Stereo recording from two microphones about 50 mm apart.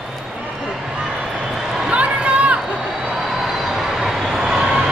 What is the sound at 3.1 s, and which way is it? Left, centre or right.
Vehicle, centre.